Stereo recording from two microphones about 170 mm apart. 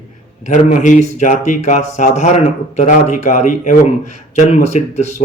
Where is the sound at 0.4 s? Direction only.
45° left (ahead or behind).